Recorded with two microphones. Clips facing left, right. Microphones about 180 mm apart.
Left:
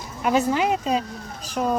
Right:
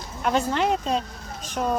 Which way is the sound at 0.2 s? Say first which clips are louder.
Left 2 dB; 5° left (ahead or behind).